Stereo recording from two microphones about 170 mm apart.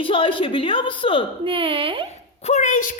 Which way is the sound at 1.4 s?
30° right (ahead or behind).